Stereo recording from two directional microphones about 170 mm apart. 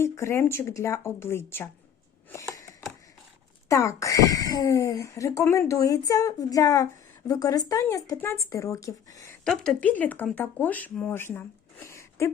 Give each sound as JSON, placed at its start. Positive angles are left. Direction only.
{"t": 0.0, "sound": "speech", "side_deg": 15}
{"t": 2.6, "sound": "a sound", "side_deg": 20}
{"t": 3.7, "sound": "speech", "side_deg": 20}
{"t": 9.4, "sound": "speech", "side_deg": 5}